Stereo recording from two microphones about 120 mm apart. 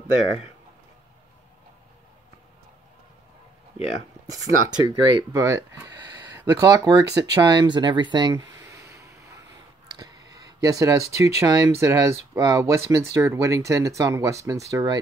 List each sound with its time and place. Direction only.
4.6 s speech: 35° right (ahead or behind)
5.4 s speech: 20° right (ahead or behind)
5.9 s speech: 35° right (ahead or behind)
9.8 s a sound: 35° right (ahead or behind)
11.1 s speech: 25° right (ahead or behind)